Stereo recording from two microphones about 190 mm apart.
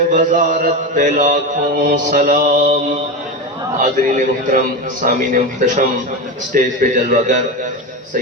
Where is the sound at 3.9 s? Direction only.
40° right (ahead or behind).